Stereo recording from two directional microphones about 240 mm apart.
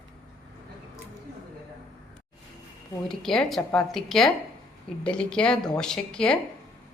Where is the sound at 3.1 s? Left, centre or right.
Centre.